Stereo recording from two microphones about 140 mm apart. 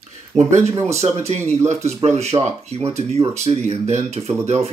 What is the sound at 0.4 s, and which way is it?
Speech, 55° right (ahead or behind).